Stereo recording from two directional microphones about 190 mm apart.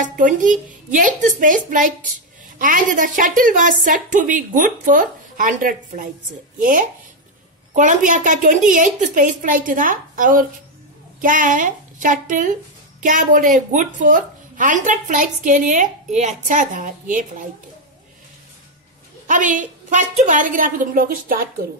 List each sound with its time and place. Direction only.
0.0 s a woman's voice: 40° right (ahead or behind)
19.2 s a woman's voice: 45° right (ahead or behind)